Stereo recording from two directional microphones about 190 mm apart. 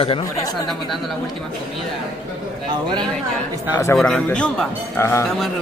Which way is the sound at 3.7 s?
15° left (ahead or behind).